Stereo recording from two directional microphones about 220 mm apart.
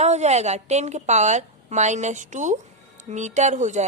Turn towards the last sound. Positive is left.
turn(degrees=-35)  # may be behind; listen again after turning